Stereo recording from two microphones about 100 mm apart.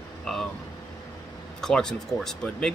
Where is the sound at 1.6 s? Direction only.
5° left (ahead or behind).